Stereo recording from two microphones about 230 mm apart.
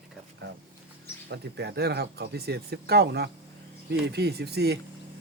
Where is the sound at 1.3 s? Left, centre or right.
Right.